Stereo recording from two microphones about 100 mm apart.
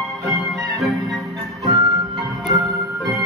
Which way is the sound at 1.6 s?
35° right (ahead or behind).